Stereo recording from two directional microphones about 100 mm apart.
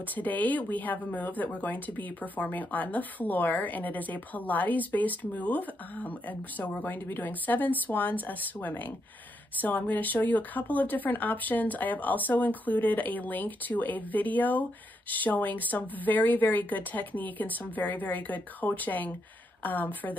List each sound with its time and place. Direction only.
0.1 s speech: 15° left (ahead or behind)